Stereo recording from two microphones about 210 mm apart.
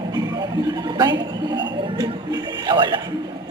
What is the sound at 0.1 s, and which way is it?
Speech, 20° right (ahead or behind).